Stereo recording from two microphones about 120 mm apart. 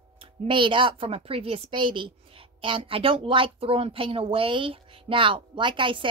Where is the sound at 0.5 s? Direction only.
45° right (ahead or behind).